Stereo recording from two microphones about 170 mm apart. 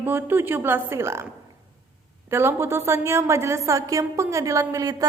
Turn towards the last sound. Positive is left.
turn(degrees=-20)  # may be behind; listen again after turning